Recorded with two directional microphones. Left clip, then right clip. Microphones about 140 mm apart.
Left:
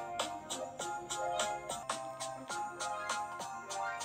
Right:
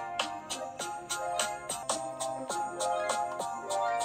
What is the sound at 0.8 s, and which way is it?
Music, 45° right (ahead or behind).